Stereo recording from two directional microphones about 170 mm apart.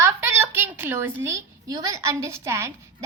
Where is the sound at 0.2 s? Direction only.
15° right (ahead or behind).